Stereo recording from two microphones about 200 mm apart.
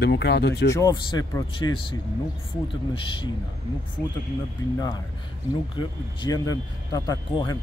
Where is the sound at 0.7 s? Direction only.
20° left (ahead or behind).